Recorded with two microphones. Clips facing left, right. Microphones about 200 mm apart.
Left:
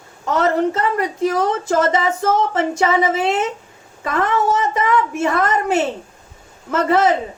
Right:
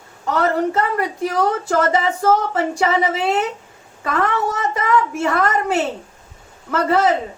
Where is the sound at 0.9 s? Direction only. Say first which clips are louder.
Left 2 dB; 20° left (ahead or behind).